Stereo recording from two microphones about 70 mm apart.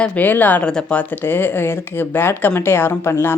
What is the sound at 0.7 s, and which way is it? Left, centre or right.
Speech, centre.